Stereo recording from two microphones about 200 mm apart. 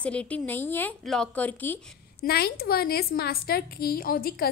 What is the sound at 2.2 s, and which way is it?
A woman's voice, 50° left (ahead or behind).